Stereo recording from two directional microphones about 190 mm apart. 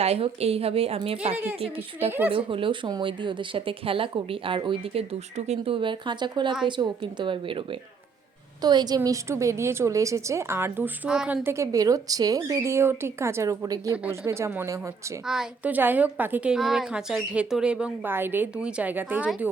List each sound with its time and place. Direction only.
0.0 s a woman's voice: 35° right (ahead or behind); by 19.5 s 5° right (ahead or behind)